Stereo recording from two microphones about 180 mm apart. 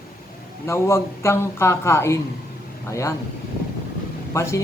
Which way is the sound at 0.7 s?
15° left (ahead or behind).